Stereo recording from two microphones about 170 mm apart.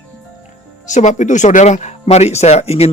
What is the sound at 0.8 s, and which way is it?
Speech, 45° left (ahead or behind).